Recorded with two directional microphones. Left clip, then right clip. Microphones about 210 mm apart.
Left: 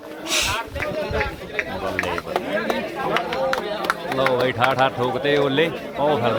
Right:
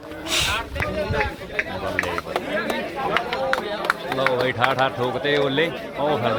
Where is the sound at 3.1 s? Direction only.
55° left (ahead or behind).